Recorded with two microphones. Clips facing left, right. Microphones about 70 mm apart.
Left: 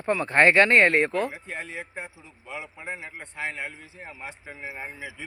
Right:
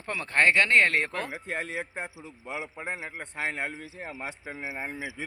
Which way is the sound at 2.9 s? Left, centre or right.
Right.